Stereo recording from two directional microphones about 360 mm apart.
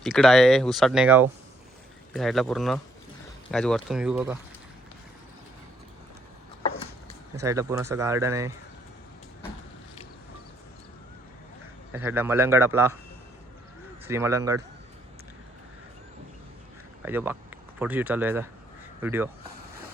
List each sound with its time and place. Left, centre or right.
0.0 s speech: centre
7.4 s speech: centre
11.9 s speech: centre
14.1 s speech: centre
17.1 s speech: centre